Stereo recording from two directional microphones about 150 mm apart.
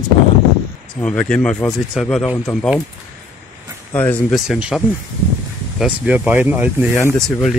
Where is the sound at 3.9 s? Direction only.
10° left (ahead or behind).